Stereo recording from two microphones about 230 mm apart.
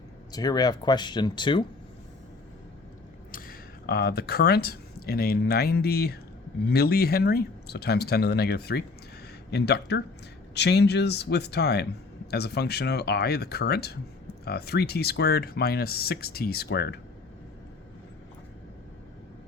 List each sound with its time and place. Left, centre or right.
0.3 s speech: centre
3.3 s speech: left